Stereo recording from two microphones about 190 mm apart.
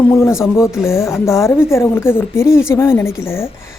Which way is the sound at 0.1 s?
15° left (ahead or behind).